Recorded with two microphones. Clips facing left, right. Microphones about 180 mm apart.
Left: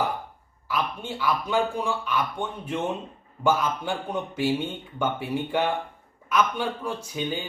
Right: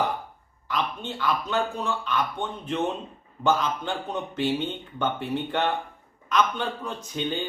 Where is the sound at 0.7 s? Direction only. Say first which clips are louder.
Even; 10° left (ahead or behind).